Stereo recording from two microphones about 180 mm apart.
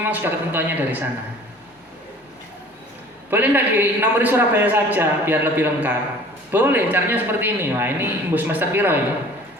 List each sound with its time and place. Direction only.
0.0 s a man's voice: 10° right (ahead or behind)
3.2 s a man's voice: 10° right (ahead or behind)